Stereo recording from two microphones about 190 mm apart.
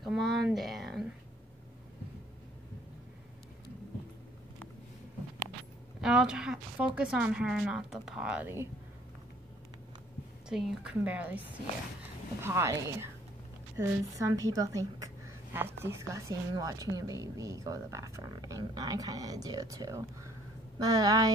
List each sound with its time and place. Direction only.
0.0 s a sound: centre (ahead or behind)
5.9 s speech: 5° right (ahead or behind)
10.5 s a woman's voice: centre (ahead or behind); by 21.3 s 20° right (ahead or behind)